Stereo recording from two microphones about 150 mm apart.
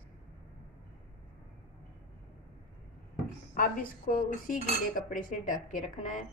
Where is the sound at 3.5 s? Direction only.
65° left (ahead or behind).